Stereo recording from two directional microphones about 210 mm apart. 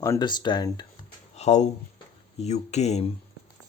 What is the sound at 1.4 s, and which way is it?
A man's voice, 35° left (ahead or behind).